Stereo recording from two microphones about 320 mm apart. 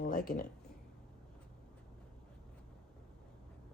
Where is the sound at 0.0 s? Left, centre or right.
Left.